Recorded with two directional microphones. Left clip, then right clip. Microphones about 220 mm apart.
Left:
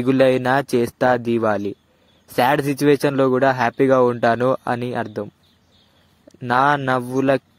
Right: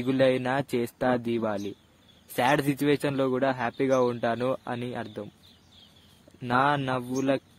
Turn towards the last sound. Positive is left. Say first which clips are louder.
# left 9 dB
turn(degrees=30)  # may be behind; listen again after turning